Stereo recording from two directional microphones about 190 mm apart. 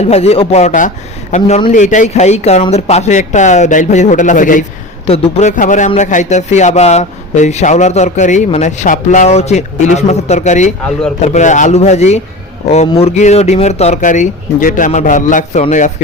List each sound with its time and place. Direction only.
0.0 s speech: 35° left (ahead or behind)
5.0 s speech: 35° left (ahead or behind)